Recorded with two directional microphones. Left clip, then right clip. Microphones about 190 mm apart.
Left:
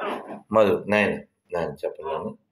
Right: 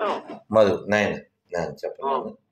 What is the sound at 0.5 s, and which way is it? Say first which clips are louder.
Speech: right 1 dB; 15° right (ahead or behind).